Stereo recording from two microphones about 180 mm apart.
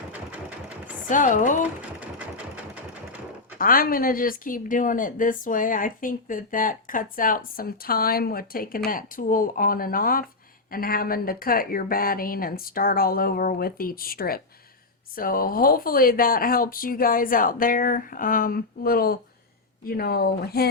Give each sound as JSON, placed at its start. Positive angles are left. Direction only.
{"t": 1.0, "sound": "speech", "side_deg": 45}
{"t": 3.6, "sound": "speech", "side_deg": 50}